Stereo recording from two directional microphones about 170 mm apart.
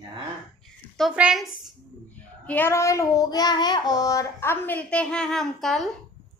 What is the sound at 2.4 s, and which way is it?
Child singing, 10° left (ahead or behind).